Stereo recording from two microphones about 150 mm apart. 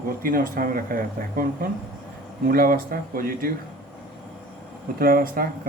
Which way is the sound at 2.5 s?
75° right (ahead or behind).